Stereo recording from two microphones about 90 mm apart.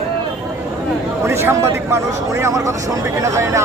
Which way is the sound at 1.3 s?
30° right (ahead or behind).